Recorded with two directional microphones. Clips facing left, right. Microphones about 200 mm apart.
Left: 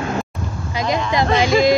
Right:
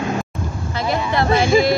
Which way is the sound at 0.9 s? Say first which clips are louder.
Left 1 dB; 15° left (ahead or behind).